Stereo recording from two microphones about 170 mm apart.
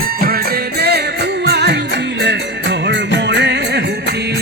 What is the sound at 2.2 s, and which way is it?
Music, 90° right.